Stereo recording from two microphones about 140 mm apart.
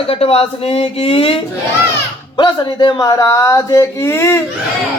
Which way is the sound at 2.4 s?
30° left (ahead or behind).